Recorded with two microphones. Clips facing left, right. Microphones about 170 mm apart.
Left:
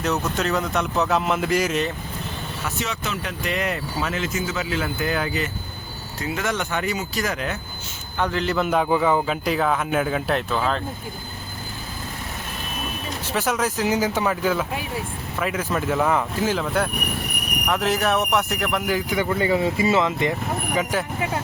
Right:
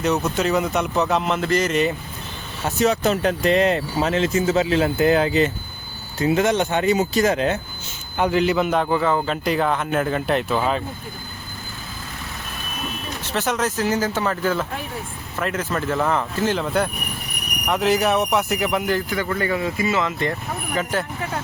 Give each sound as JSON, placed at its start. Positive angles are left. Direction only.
{"t": 0.0, "sound": "a man's voice", "side_deg": 0}
{"t": 2.6, "sound": "speech", "side_deg": -40}
{"t": 8.2, "sound": "a man's voice", "side_deg": -10}
{"t": 10.5, "sound": "speech", "side_deg": -10}
{"t": 13.3, "sound": "a man's voice", "side_deg": 5}
{"t": 18.9, "sound": "speech", "side_deg": 10}